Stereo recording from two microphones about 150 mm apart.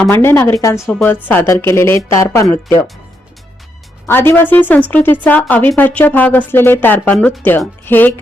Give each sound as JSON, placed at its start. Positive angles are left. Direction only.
{"t": 0.0, "sound": "speech", "side_deg": 15}
{"t": 4.0, "sound": "speech", "side_deg": 15}